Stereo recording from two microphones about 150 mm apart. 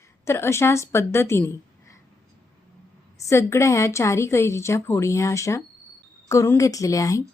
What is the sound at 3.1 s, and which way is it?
A woman's voice, 20° left (ahead or behind).